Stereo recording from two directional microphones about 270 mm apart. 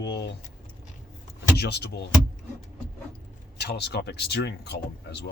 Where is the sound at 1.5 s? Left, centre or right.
Left.